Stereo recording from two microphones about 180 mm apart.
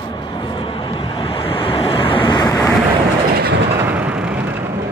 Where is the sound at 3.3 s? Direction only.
65° right (ahead or behind).